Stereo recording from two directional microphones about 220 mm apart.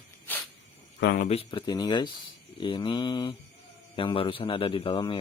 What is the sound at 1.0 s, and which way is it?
Speech, 45° left (ahead or behind).